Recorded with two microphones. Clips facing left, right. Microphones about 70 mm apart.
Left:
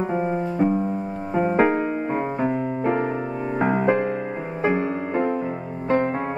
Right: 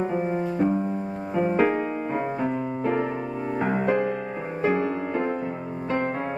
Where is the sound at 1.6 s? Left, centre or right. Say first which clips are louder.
Left 3 dB; left.